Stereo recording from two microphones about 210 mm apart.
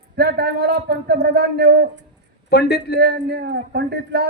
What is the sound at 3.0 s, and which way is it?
Speech, 50° right (ahead or behind).